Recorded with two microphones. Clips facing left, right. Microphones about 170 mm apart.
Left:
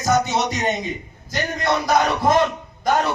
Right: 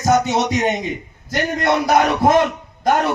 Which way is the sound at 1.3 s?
60° right (ahead or behind).